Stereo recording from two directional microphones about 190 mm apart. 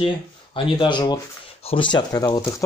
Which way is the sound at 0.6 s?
25° left (ahead or behind).